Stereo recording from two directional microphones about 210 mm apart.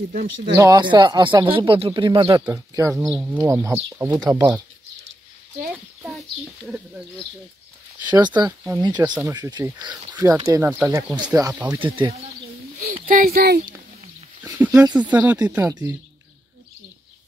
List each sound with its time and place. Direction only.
0.1 s speech: 45° right (ahead or behind)
0.6 s speech: 20° right (ahead or behind)
2.4 s speech: 15° right (ahead or behind)
2.9 s speech: centre (ahead or behind)
6.0 s speech: centre (ahead or behind)
8.4 s speech: 20° right (ahead or behind)
11.7 s speech: 25° right (ahead or behind)
12.7 s speech: 35° right (ahead or behind)
13.7 s a sound: 15° right (ahead or behind)
15.0 s speech: 5° right (ahead or behind)